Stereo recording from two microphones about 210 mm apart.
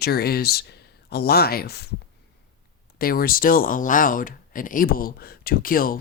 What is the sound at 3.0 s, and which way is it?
Speech, 45° left (ahead or behind).